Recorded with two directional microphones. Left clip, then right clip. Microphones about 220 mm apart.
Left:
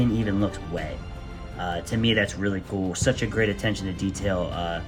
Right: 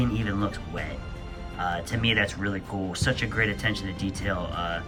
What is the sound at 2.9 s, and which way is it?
Speech, 15° left (ahead or behind).